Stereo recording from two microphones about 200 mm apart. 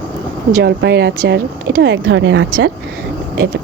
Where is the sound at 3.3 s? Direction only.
55° right (ahead or behind).